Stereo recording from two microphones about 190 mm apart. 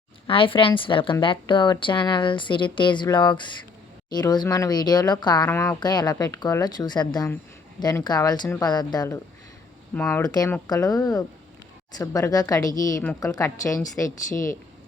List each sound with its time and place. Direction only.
0.3 s speech: 25° left (ahead or behind)
5.5 s a woman's voice: 10° left (ahead or behind)
5.8 s a woman's voice: 20° left (ahead or behind)